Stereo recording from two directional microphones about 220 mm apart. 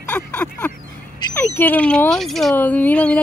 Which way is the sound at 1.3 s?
10° left (ahead or behind).